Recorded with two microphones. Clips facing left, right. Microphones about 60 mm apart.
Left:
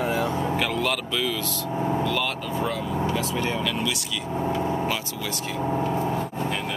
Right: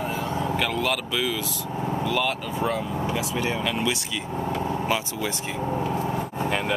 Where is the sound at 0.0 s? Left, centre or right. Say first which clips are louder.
Left 4 dB; left.